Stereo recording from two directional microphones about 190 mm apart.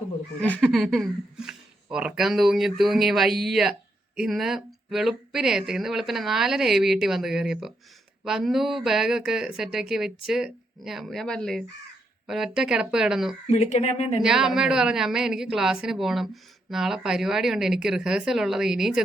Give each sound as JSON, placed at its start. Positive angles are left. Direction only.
{"t": 0.4, "sound": "speech", "side_deg": 5}
{"t": 13.5, "sound": "speech", "side_deg": 35}
{"t": 14.2, "sound": "speech", "side_deg": -5}